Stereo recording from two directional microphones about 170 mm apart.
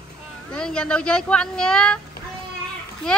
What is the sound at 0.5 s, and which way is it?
Speech, 5° left (ahead or behind).